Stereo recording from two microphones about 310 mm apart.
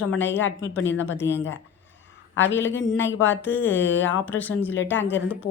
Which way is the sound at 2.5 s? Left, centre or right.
Centre.